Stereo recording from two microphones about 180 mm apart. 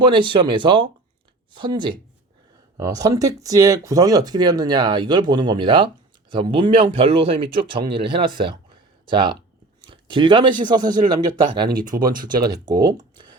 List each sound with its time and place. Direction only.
0.0 s speech: 25° right (ahead or behind)